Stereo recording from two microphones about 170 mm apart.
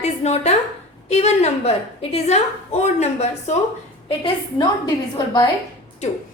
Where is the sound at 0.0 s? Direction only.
40° left (ahead or behind).